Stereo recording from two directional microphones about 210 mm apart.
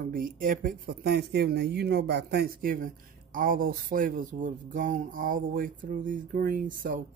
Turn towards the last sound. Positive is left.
turn(degrees=-40)  # may be behind; listen again after turning